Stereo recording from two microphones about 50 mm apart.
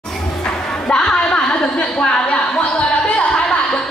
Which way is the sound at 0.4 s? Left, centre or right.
Centre.